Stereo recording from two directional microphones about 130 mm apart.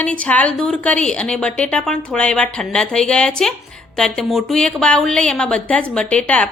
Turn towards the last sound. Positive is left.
turn(degrees=10)  # may be behind; listen again after turning